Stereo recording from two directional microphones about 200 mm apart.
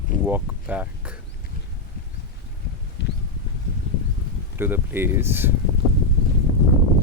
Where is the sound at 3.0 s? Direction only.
60° left (ahead or behind).